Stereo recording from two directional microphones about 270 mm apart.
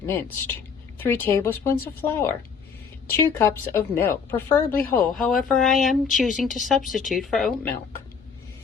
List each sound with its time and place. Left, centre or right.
0.0 s speech: centre
3.3 s a woman's voice: centre